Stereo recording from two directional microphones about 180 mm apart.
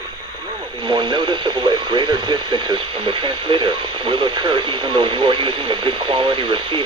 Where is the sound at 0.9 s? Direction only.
25° right (ahead or behind).